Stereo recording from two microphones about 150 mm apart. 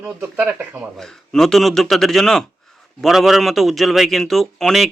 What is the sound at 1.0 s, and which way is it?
Speech, 5° left (ahead or behind).